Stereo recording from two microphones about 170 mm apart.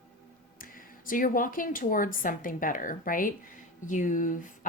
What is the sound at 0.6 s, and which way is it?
Speech, 55° left (ahead or behind).